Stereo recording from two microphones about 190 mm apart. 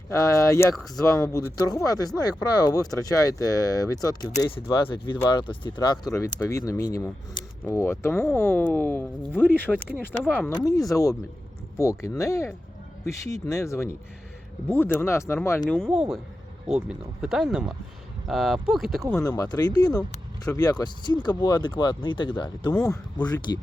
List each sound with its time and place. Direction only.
0.1 s speech: 15° left (ahead or behind)
10.5 s speech: 20° left (ahead or behind)
15.9 s speech: 5° right (ahead or behind)
19.1 s speech: 20° left (ahead or behind)